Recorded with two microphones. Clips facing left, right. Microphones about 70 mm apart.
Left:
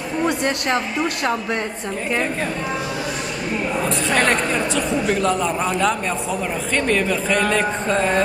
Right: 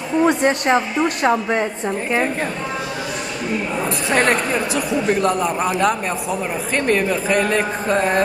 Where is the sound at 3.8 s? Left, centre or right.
Centre.